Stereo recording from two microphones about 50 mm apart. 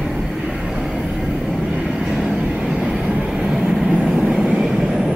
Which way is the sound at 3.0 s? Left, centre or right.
Right.